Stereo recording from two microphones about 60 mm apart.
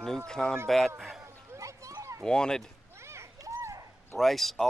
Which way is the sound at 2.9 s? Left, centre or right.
Right.